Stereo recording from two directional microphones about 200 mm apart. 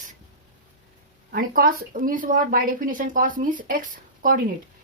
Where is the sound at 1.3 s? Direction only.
45° right (ahead or behind).